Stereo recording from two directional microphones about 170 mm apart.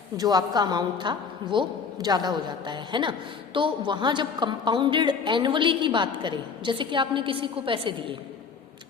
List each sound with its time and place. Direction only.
0.2 s a woman's voice: 25° right (ahead or behind)